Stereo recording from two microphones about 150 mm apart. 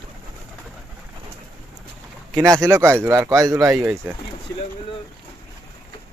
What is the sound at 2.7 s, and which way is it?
Speech, 15° right (ahead or behind).